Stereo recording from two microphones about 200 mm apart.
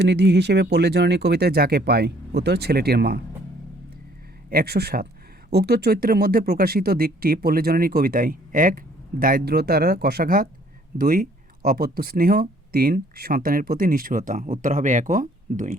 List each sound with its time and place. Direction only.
0.0 s speech: 60° right (ahead or behind)
4.4 s speech: 50° right (ahead or behind)